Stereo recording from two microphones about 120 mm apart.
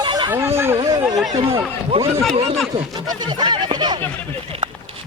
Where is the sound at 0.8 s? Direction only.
35° right (ahead or behind).